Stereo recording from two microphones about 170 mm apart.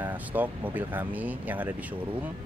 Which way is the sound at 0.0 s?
10° right (ahead or behind).